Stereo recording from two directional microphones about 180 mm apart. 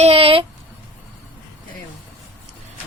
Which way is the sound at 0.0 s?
35° right (ahead or behind).